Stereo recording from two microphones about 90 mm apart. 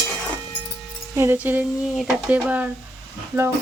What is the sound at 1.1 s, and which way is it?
Speech, 30° right (ahead or behind).